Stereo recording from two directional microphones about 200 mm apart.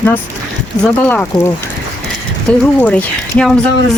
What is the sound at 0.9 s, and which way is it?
Speech, 10° left (ahead or behind).